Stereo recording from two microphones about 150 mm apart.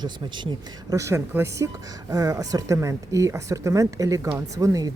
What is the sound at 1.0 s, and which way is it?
Speech, 20° right (ahead or behind).